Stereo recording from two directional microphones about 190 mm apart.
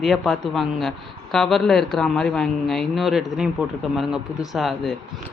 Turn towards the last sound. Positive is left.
turn(degrees=0)  # may be behind; listen again after turning